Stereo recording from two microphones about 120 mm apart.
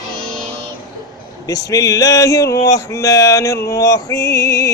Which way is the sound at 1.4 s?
30° left (ahead or behind).